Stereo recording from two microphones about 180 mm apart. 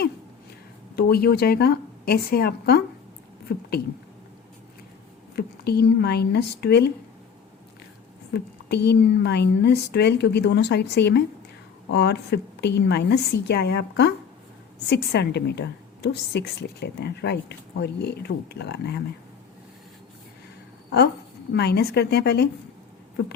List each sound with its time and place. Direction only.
0.9 s a woman's voice: 55° left (ahead or behind)
5.4 s a woman's voice: 60° left (ahead or behind)
8.3 s a woman's voice: 70° left (ahead or behind)
21.5 s a woman's voice: 65° left (ahead or behind)